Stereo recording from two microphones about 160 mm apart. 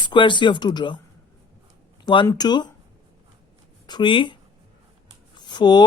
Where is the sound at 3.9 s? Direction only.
30° left (ahead or behind).